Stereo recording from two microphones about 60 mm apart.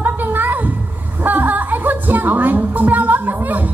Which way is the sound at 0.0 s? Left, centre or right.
Right.